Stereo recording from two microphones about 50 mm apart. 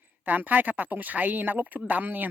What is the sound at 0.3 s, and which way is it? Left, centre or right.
Speech, right.